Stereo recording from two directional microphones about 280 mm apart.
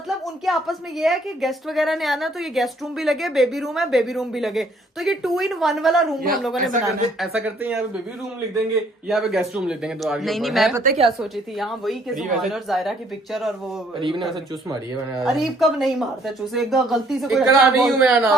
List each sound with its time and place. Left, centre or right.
0.4 s a woman's voice: centre
9.0 s a woman's voice: centre
10.8 s a woman's voice: right
11.2 s a woman's voice: centre
14.0 s a man's voice: centre
15.2 s a woman's voice: centre